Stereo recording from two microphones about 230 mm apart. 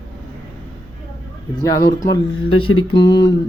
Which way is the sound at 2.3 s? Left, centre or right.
Left.